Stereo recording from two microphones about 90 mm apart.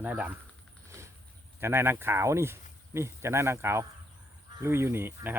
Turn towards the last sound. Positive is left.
turn(degrees=-25)  # may be behind; listen again after turning